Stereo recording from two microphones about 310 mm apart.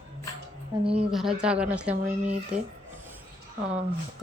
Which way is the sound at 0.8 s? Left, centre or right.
Centre.